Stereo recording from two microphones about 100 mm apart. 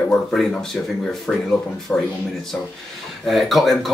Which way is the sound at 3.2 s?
Centre (ahead or behind).